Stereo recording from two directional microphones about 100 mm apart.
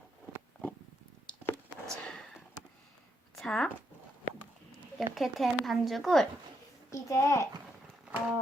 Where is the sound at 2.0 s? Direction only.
5° left (ahead or behind).